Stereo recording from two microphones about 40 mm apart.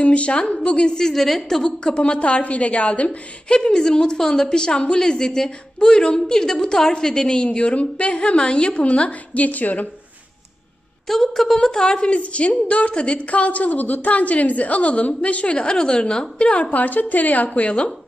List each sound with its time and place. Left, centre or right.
0.0 s a woman's voice: left
0.9 s a woman's voice: centre
1.6 s a woman's voice: left
2.1 s a woman's voice: left
11.1 s a woman's voice: centre; by 16.6 s left
16.7 s a woman's voice: left